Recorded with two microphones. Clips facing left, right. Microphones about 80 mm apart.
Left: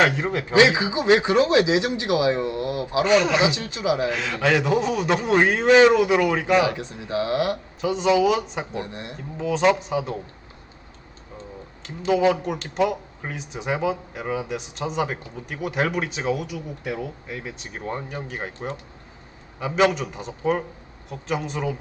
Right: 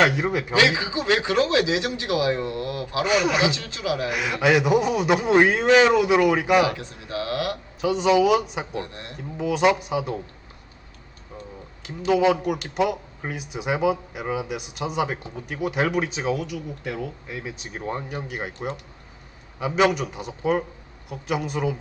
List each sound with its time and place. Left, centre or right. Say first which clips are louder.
0.0 s speech: even; centre
0.5 s speech: left 5 dB; left
3.0 s speech: left 3 dB; centre
3.4 s speech: left 2 dB; left
4.1 s speech: right 1 dB; centre
6.7 s speech: left 2 dB; left
7.8 s speech: right 1 dB; centre
8.7 s speech: left 1 dB; left
9.4 s speech: even; centre
12.2 s speech: even; centre
16.3 s speech: even; centre
17.8 s speech: even; centre